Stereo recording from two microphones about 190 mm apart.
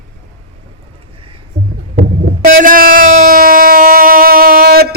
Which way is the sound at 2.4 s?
45° right (ahead or behind).